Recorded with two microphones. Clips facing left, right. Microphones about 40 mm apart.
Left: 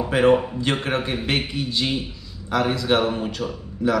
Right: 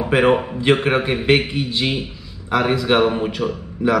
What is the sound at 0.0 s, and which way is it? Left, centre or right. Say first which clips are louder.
Speech: right 2 dB; right.